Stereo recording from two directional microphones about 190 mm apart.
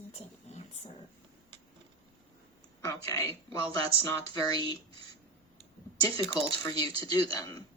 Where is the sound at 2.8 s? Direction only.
15° left (ahead or behind).